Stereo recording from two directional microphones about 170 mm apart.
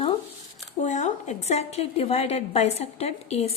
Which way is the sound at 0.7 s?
45° left (ahead or behind).